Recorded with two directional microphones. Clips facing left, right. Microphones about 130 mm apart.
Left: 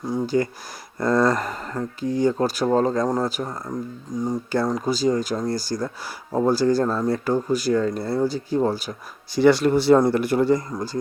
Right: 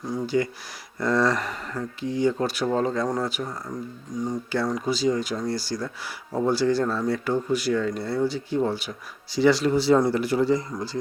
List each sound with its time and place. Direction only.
0.3 s speech: 40° left (ahead or behind)
9.3 s speech: 55° left (ahead or behind)